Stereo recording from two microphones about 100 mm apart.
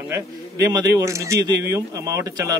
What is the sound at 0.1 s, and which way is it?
Speech, 35° right (ahead or behind).